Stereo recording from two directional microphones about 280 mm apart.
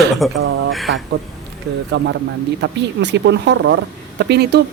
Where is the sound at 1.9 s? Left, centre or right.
Right.